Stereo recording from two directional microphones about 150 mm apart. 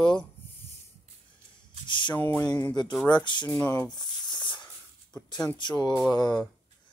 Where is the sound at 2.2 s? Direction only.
15° left (ahead or behind).